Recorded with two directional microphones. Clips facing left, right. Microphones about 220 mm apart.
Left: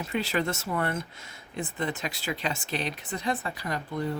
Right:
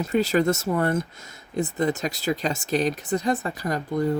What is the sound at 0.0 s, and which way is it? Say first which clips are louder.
Speech: right 8 dB; 40° right (ahead or behind).